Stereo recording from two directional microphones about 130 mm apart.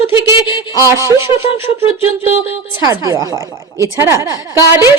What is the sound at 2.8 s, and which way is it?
A woman's voice, 25° right (ahead or behind).